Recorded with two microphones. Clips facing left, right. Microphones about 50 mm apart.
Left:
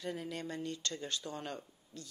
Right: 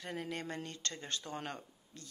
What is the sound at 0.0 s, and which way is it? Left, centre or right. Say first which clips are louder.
Speech: left 1 dB; right.